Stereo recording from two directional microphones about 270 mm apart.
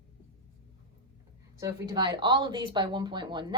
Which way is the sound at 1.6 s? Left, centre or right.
Centre.